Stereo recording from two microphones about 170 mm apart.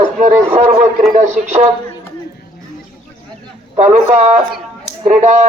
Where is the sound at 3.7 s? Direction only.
40° right (ahead or behind).